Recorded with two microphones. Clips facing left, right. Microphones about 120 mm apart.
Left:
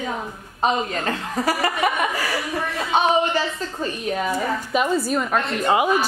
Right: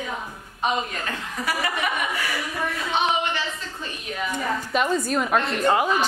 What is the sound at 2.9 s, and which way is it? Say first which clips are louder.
A woman's voice: left 6 dB; 40° left (ahead or behind).